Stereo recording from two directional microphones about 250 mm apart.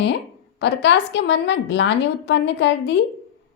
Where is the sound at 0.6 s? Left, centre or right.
Left.